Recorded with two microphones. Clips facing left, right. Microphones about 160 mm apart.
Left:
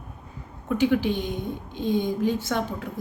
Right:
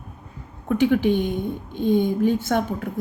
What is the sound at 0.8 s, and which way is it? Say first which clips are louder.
A woman's voice: right 4 dB; 50° right (ahead or behind).